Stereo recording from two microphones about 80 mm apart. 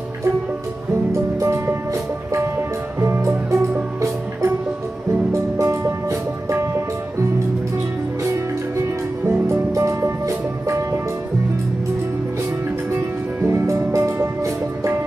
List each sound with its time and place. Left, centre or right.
3.0 s music: right
5.3 s music: right
8.2 s music: right
13.5 s music: right